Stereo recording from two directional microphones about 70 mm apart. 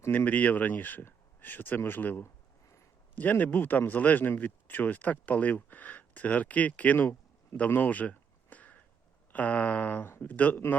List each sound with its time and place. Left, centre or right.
0.3 s speech: left